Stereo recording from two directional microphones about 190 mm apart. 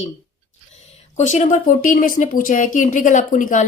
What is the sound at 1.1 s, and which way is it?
Speech, 40° left (ahead or behind).